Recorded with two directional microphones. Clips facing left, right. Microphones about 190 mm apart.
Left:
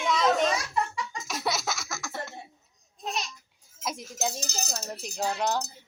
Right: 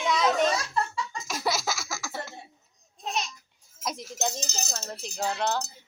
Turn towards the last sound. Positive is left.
turn(degrees=10)  # may be behind; listen again after turning